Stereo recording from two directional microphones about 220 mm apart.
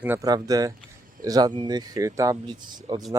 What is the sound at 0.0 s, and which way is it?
Speech, 10° right (ahead or behind).